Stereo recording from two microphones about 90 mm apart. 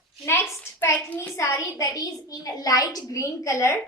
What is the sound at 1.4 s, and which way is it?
A woman's voice, 35° left (ahead or behind).